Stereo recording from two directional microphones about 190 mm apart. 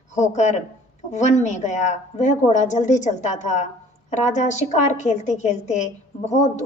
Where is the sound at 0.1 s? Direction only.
40° left (ahead or behind).